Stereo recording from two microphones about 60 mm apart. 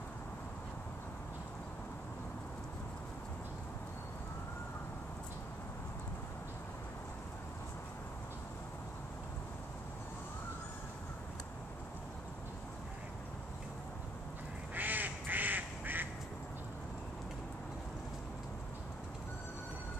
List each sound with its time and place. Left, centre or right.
14.8 s quack: right